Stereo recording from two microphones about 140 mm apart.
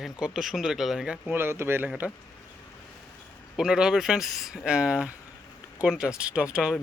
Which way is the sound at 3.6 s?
5° right (ahead or behind).